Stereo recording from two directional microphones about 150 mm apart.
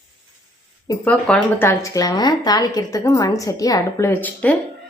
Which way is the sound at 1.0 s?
10° left (ahead or behind).